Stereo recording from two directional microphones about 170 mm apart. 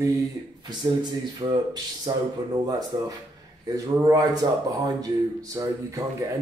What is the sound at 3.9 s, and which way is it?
Speech, 20° right (ahead or behind).